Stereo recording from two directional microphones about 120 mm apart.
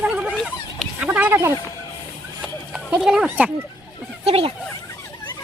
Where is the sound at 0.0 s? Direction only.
10° right (ahead or behind).